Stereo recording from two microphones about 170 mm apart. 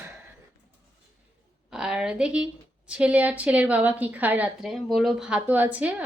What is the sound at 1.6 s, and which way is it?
A woman's voice, 5° right (ahead or behind).